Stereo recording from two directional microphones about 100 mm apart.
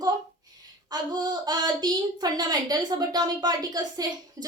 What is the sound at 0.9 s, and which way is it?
A woman's voice, 45° right (ahead or behind).